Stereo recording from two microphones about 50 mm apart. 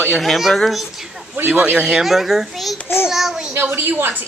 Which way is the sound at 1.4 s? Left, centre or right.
Right.